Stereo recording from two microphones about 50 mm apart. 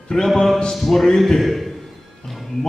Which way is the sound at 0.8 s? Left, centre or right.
Centre.